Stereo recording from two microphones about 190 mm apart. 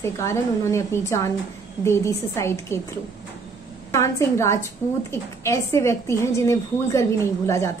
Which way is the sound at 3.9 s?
15° left (ahead or behind).